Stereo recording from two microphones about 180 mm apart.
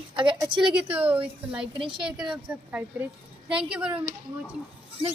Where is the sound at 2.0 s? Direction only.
5° right (ahead or behind).